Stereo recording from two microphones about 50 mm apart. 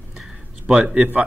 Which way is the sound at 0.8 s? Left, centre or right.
Right.